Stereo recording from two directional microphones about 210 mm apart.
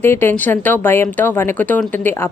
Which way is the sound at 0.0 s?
10° left (ahead or behind).